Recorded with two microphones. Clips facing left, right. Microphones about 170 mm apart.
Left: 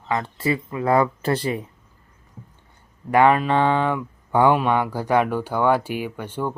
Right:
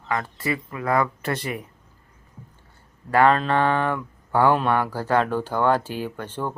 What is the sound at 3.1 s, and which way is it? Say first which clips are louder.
Speech: left 2 dB; 15° left (ahead or behind).